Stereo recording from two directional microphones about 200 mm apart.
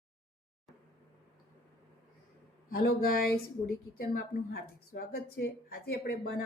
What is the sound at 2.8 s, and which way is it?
A woman's voice, 50° left (ahead or behind).